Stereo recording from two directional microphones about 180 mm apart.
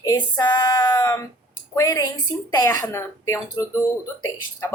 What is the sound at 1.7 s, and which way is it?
Speech, 20° left (ahead or behind).